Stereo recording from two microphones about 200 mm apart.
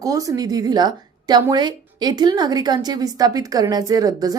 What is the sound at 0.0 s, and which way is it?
A woman's voice, 15° right (ahead or behind).